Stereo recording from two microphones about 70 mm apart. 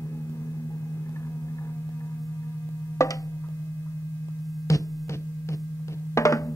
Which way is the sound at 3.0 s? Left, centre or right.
Left.